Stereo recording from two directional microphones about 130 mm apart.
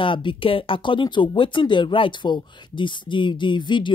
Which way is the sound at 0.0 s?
40° left (ahead or behind).